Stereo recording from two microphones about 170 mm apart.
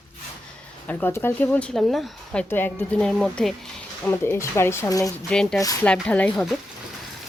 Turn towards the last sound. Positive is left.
turn(degrees=5)  # may be behind; listen again after turning